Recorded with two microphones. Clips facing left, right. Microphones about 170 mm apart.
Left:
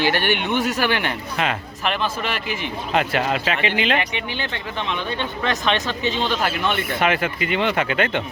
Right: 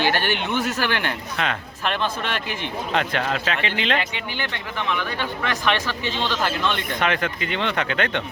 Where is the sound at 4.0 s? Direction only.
20° left (ahead or behind).